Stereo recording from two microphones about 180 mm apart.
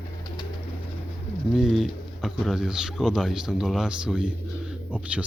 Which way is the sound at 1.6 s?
Centre (ahead or behind).